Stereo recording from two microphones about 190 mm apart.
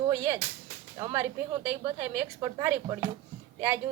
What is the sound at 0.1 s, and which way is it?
A woman's voice, 15° right (ahead or behind).